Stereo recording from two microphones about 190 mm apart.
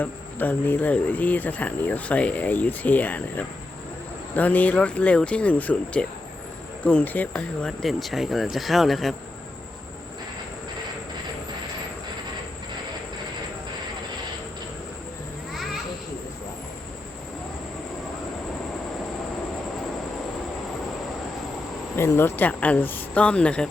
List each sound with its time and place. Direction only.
0.0 s speech: 10° left (ahead or behind)
21.9 s speech: 15° left (ahead or behind)